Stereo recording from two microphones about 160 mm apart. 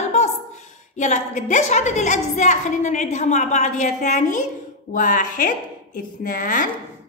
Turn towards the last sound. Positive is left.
turn(degrees=55)  # may be behind; listen again after turning